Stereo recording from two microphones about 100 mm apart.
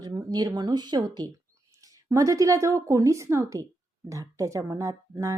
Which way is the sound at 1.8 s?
35° right (ahead or behind).